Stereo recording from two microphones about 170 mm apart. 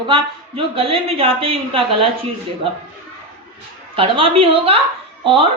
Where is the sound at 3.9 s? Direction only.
30° right (ahead or behind).